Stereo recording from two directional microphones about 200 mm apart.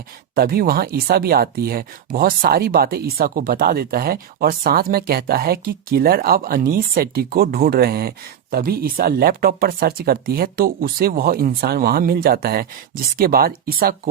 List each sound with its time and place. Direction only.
0.3 s speech: 50° right (ahead or behind)